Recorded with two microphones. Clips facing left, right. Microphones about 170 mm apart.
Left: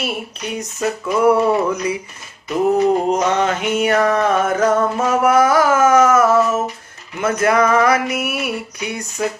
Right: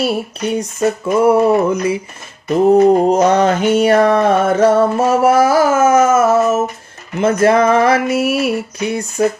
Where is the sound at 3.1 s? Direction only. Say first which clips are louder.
Right 5 dB; 35° right (ahead or behind).